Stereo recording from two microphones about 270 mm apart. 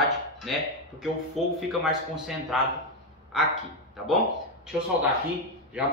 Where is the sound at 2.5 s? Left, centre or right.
Centre.